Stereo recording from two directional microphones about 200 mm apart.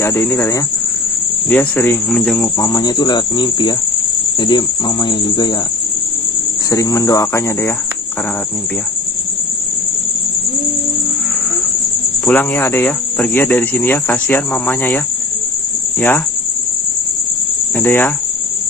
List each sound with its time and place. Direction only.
0.0 s speech: 10° left (ahead or behind)
2.6 s cricket: 20° left (ahead or behind)
6.7 s speech: 15° left (ahead or behind)
12.2 s speech: 10° left (ahead or behind)
17.7 s speech: 10° left (ahead or behind)